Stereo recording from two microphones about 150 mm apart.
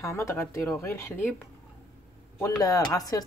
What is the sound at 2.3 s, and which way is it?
Speech, 20° left (ahead or behind).